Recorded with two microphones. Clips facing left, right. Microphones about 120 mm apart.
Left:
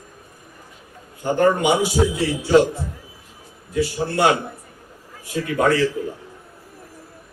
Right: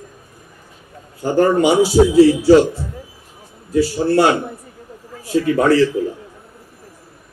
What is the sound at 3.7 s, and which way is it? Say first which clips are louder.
Speech: right 7 dB; 35° right (ahead or behind).